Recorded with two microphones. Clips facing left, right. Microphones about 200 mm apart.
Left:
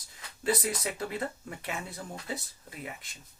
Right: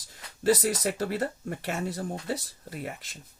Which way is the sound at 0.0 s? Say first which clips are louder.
Right 6 dB; 85° right.